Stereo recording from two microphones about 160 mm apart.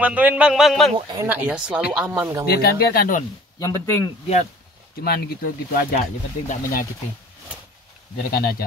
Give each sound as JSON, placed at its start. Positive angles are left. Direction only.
{"t": 0.0, "sound": "speech", "side_deg": -10}
{"t": 1.2, "sound": "speech", "side_deg": -10}
{"t": 2.4, "sound": "speech", "side_deg": 75}
{"t": 3.5, "sound": "speech", "side_deg": 20}
{"t": 5.0, "sound": "speech", "side_deg": 75}
{"t": 6.4, "sound": "speech", "side_deg": 55}
{"t": 8.2, "sound": "speech", "side_deg": 70}